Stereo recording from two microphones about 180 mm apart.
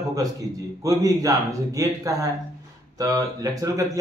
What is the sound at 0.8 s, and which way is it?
A man's voice, 20° right (ahead or behind).